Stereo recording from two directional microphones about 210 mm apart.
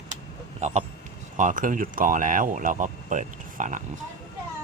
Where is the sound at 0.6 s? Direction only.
35° right (ahead or behind).